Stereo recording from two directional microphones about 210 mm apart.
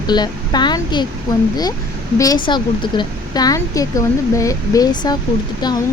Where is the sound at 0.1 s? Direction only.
20° left (ahead or behind).